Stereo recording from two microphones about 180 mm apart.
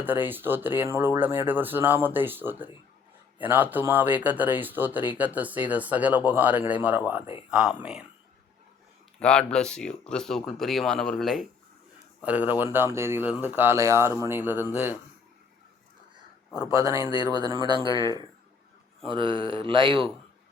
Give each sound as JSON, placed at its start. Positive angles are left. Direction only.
{"t": 0.0, "sound": "speech", "side_deg": -10}
{"t": 9.1, "sound": "speech", "side_deg": 5}
{"t": 16.7, "sound": "speech", "side_deg": -20}
{"t": 17.8, "sound": "speech", "side_deg": 20}
{"t": 19.1, "sound": "speech", "side_deg": -25}